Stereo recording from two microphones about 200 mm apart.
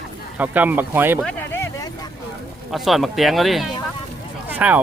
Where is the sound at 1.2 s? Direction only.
5° left (ahead or behind).